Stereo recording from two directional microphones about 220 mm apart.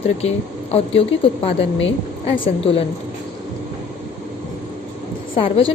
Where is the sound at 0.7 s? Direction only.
25° left (ahead or behind).